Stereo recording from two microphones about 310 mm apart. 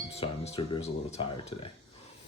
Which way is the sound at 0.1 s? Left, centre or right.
Centre.